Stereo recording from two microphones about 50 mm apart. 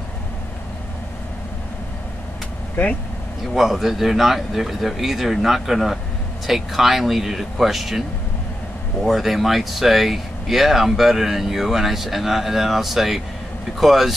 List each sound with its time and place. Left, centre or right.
2.7 s speech: left
3.5 s speech: centre
9.0 s speech: centre